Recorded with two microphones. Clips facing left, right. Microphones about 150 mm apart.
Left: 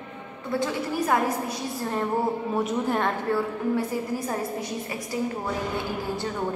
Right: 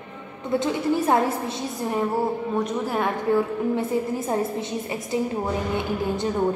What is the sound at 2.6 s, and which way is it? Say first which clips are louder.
Speech: left 1 dB; 5° left (ahead or behind).